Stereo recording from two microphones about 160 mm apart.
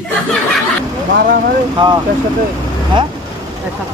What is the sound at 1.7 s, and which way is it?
Speech, 25° right (ahead or behind).